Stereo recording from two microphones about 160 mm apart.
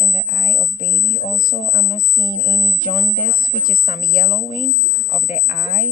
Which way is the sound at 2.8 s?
50° left (ahead or behind).